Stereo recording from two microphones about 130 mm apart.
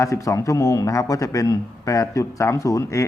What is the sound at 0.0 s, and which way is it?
A man's voice, 25° left (ahead or behind).